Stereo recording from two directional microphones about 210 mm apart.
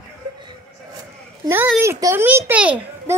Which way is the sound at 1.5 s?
10° right (ahead or behind).